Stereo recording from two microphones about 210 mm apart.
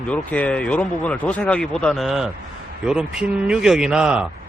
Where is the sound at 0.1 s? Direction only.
5° left (ahead or behind).